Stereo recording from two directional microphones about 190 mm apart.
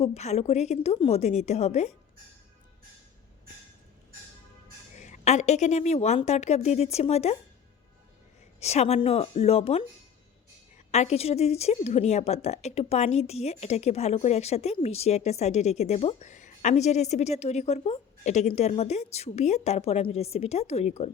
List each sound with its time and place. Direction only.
0.0 s a woman's voice: 35° left (ahead or behind)
4.9 s a woman's voice: 40° left (ahead or behind)
8.6 s a woman's voice: 35° left (ahead or behind)
10.9 s a woman's voice: 35° left (ahead or behind)